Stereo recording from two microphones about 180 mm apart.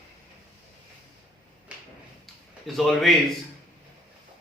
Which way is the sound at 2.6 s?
Centre (ahead or behind).